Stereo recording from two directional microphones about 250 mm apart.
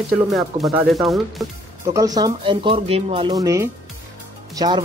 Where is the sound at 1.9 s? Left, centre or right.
Centre.